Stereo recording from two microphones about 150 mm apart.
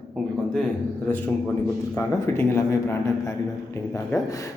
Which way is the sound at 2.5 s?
15° left (ahead or behind).